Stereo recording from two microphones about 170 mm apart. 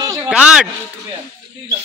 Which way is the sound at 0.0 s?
20° right (ahead or behind).